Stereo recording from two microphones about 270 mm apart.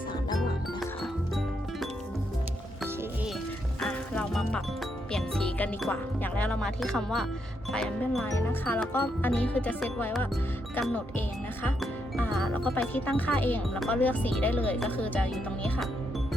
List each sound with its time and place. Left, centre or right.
3.8 s music: centre
7.7 s speech: centre